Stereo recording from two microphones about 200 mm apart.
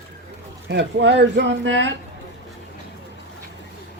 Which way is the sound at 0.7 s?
60° right (ahead or behind).